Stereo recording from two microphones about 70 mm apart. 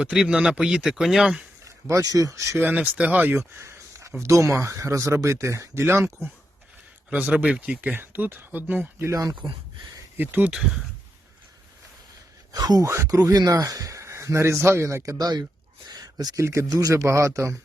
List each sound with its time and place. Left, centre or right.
0.0 s speech: centre
1.6 s speech: right
2.6 s speech: right
3.6 s a sound: right
4.2 s speech: right
7.1 s speech: right
10.2 s speech: right
10.5 s speech: centre
12.5 s speech: right
12.8 s speech: right
13.1 s speech: right
15.2 s speech: right
15.9 s a sound: right
16.4 s speech: right